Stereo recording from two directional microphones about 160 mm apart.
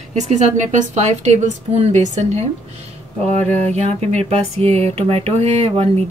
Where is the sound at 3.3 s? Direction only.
45° right (ahead or behind).